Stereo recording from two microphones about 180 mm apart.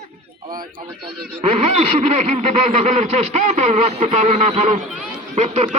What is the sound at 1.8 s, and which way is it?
Speech, 40° right (ahead or behind).